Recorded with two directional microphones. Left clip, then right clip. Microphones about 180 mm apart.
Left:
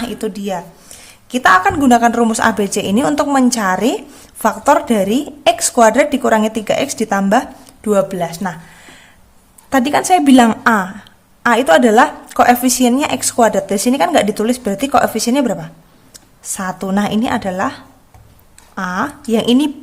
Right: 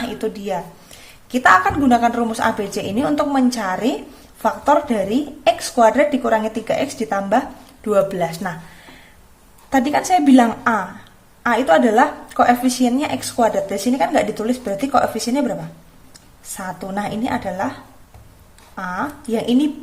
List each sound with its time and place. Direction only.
0.0 s a woman's voice: 30° left (ahead or behind)